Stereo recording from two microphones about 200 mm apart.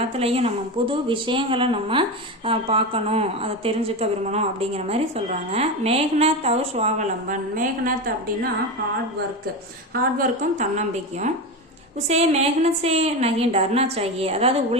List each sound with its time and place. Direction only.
0.2 s speech: 30° right (ahead or behind)
9.9 s speech: 40° right (ahead or behind)